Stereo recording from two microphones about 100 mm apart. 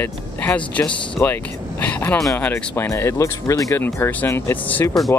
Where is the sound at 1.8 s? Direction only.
15° left (ahead or behind).